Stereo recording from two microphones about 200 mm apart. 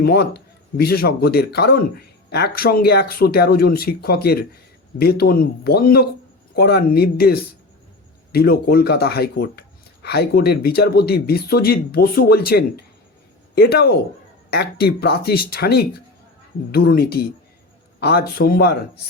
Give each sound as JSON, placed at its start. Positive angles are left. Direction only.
{"t": 0.0, "sound": "speech", "side_deg": 55}